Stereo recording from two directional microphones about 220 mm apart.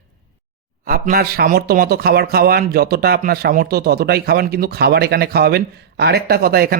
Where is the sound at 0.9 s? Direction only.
40° right (ahead or behind).